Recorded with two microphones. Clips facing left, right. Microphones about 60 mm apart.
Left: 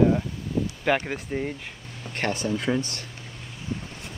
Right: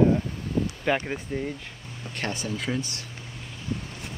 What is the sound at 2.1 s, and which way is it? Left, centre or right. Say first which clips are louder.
Speech: left 4 dB; left.